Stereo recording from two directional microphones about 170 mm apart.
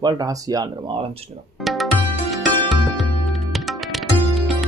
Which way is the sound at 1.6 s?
Centre (ahead or behind).